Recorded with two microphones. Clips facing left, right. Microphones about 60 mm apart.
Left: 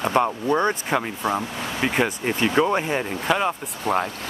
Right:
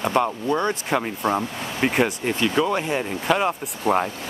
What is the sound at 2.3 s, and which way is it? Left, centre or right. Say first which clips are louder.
Speech: left 1 dB; left.